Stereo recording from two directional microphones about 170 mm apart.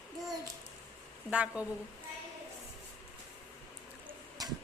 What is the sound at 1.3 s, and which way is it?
Speech, 5° right (ahead or behind).